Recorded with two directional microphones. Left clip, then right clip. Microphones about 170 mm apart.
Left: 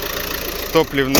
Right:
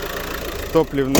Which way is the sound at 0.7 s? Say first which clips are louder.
Left 2 dB; 25° right (ahead or behind).